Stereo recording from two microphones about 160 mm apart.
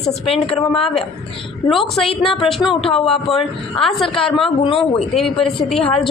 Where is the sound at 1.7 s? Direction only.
Centre (ahead or behind).